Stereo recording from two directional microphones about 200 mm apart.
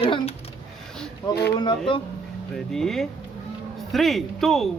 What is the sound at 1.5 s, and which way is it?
Speech, 20° left (ahead or behind).